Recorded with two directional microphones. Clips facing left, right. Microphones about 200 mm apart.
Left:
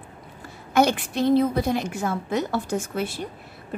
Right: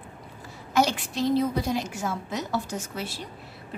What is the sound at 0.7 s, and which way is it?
A woman's voice, 55° left (ahead or behind).